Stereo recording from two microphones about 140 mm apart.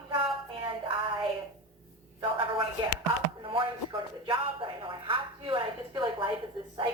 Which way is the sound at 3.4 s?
35° right (ahead or behind).